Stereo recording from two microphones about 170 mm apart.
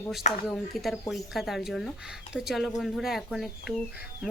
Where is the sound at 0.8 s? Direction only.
Centre (ahead or behind).